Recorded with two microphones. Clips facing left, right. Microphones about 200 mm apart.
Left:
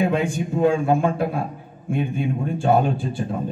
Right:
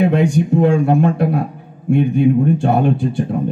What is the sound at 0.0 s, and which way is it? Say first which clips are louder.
Speech: right 7 dB; 70° right (ahead or behind).